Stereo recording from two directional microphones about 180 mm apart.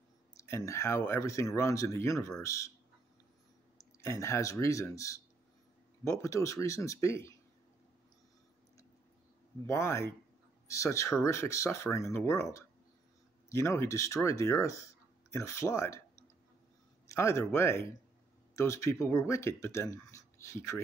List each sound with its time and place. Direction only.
0.5 s speech: 15° left (ahead or behind)
3.7 s speech: 15° left (ahead or behind)
9.7 s speech: 15° left (ahead or behind)
17.1 s speech: 15° left (ahead or behind)